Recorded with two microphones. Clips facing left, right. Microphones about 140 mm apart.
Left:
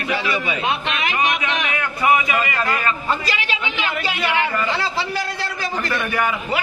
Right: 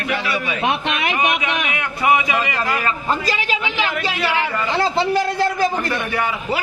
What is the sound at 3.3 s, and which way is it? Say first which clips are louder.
Speech: right 3 dB; 40° right (ahead or behind).